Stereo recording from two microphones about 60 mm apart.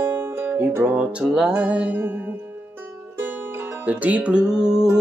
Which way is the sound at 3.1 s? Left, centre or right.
Right.